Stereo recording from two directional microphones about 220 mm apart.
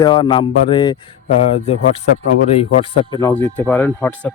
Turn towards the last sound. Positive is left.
turn(degrees=10)  # may be behind; listen again after turning